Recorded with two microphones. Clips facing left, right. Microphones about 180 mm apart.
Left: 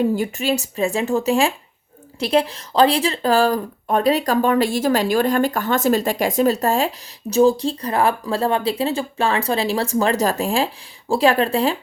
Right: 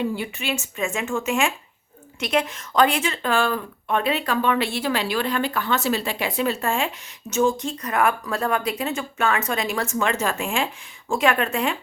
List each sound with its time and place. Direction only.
0.0 s speech: 40° left (ahead or behind)